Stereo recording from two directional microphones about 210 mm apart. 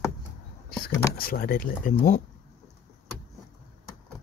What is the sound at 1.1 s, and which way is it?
Speech, 45° left (ahead or behind).